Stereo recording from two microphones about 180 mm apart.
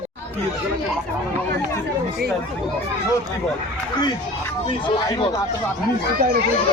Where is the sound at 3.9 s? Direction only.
25° left (ahead or behind).